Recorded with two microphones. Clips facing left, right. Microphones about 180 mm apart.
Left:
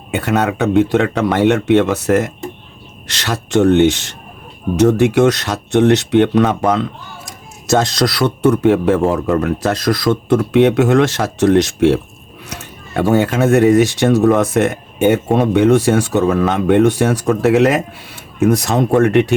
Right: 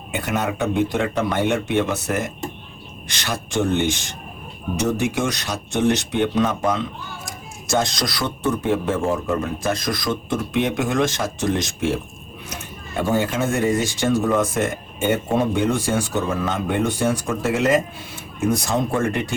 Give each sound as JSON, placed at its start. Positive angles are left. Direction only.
{"t": 0.1, "sound": "speech", "side_deg": 65}
{"t": 13.0, "sound": "speech", "side_deg": 65}